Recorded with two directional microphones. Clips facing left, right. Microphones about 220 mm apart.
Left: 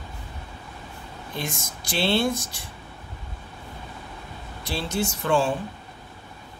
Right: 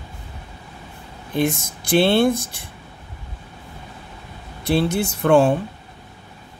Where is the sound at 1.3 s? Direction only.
55° right (ahead or behind).